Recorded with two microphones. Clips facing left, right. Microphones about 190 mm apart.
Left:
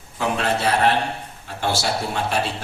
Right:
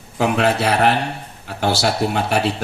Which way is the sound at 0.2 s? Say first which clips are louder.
Right 5 dB; 70° right (ahead or behind).